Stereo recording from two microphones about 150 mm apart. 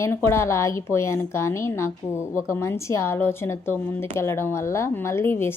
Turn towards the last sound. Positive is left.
turn(degrees=15)  # may be behind; listen again after turning